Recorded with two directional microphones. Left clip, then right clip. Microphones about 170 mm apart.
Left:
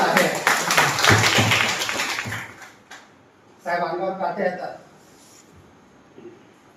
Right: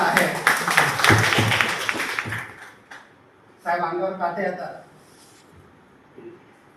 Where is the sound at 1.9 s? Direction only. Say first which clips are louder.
Even; 45° right (ahead or behind).